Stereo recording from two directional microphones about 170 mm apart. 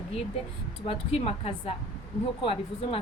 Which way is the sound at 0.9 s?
35° left (ahead or behind).